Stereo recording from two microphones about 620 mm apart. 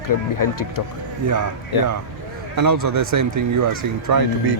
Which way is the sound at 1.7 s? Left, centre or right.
Left.